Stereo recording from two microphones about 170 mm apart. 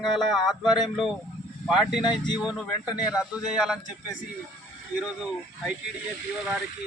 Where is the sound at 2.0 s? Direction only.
25° left (ahead or behind).